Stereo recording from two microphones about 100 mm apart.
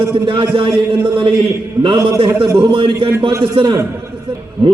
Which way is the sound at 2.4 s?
60° right (ahead or behind).